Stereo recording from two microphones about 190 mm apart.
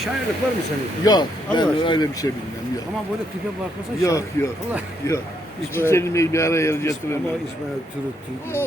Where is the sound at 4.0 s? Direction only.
15° left (ahead or behind).